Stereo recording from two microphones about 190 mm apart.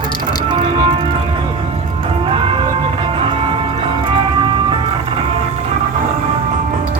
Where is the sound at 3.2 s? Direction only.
30° right (ahead or behind).